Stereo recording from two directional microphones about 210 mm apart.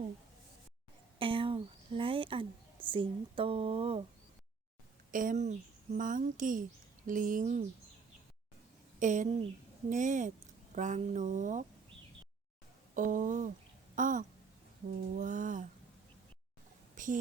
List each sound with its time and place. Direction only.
1.2 s speech: 25° right (ahead or behind)
5.1 s speech: 40° right (ahead or behind)
9.0 s speech: 35° right (ahead or behind)
12.9 s speech: 40° right (ahead or behind)
16.9 s a sound: 40° right (ahead or behind)